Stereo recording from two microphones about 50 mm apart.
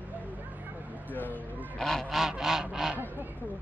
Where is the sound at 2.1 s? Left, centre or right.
Centre.